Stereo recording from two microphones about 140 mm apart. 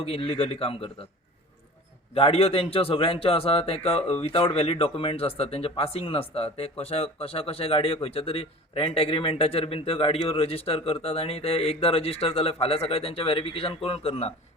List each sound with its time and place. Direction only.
0.0 s a man's voice: 40° left (ahead or behind)
2.1 s speech: 45° left (ahead or behind)